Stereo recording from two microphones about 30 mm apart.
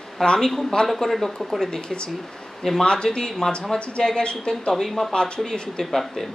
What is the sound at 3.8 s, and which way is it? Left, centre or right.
Speech, left.